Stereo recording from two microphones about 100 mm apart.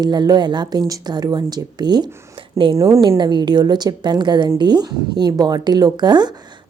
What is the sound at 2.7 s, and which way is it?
Speech, 30° right (ahead or behind).